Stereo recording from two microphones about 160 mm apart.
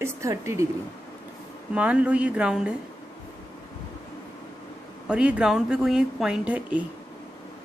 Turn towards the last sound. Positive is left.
turn(degrees=-10)  # may be behind; listen again after turning